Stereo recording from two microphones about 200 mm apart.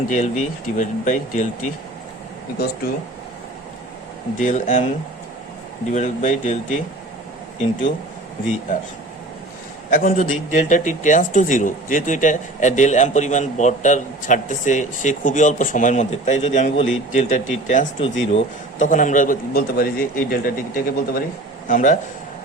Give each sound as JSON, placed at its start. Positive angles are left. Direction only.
{"t": 0.1, "sound": "speech", "side_deg": 40}
{"t": 4.4, "sound": "speech", "side_deg": 40}
{"t": 5.9, "sound": "speech", "side_deg": 35}
{"t": 9.9, "sound": "speech", "side_deg": 45}